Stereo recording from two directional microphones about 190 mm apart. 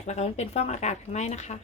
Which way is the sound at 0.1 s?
35° left (ahead or behind).